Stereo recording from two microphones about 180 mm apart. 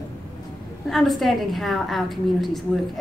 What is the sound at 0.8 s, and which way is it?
A woman's voice, centre (ahead or behind).